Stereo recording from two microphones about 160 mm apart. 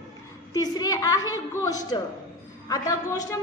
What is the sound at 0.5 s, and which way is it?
A woman's voice, 25° left (ahead or behind).